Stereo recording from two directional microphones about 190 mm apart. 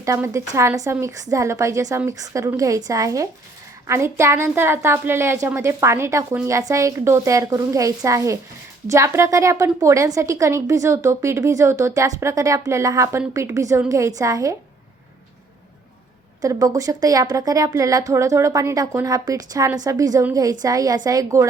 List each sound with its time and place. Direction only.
0.0 s a woman's voice: 15° right (ahead or behind)
16.4 s a woman's voice: 20° right (ahead or behind)